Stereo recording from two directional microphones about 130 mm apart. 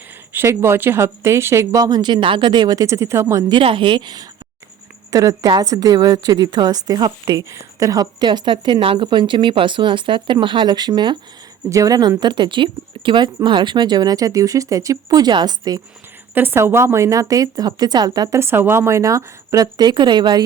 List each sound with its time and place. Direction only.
0.3 s speech: 20° right (ahead or behind)
3.5 s a woman's voice: 40° right (ahead or behind)
16.3 s speech: 15° right (ahead or behind); by 20.4 s 35° right (ahead or behind)